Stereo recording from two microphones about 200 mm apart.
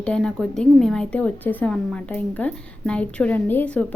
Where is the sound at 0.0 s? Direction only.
5° left (ahead or behind).